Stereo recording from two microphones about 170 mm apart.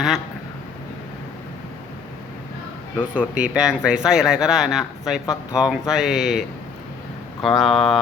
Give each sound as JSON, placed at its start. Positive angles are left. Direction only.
{"t": 3.2, "sound": "speech", "side_deg": -5}
{"t": 5.2, "sound": "speech", "side_deg": 20}
{"t": 5.5, "sound": "speech", "side_deg": -5}
{"t": 7.4, "sound": "speech", "side_deg": 0}